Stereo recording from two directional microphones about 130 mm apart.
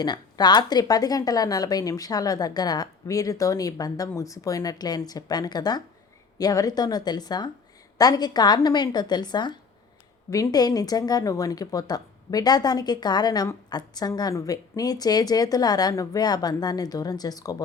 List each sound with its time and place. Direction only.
0.0 s a woman's voice: 30° left (ahead or behind)